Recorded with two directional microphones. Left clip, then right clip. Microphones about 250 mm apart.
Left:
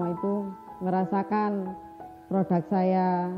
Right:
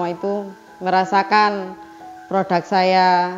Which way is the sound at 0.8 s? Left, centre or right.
Centre.